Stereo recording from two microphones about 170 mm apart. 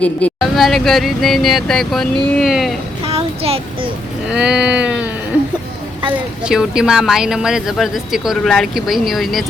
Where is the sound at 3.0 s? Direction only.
35° right (ahead or behind).